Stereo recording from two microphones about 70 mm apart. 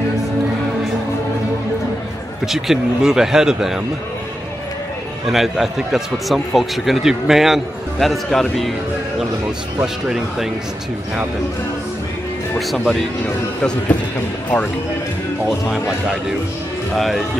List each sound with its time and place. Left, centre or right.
2.4 s speech: centre
5.2 s a man's voice: centre
10.0 s a man's voice: centre
13.6 s speech: centre
16.9 s a man's voice: centre